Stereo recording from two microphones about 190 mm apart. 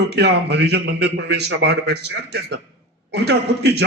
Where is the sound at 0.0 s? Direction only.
60° right (ahead or behind).